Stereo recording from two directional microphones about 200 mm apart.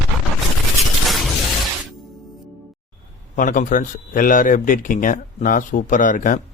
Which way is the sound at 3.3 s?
40° left (ahead or behind).